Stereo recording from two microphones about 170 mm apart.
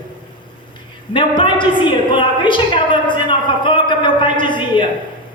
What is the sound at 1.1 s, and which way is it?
A woman's voice, 30° left (ahead or behind).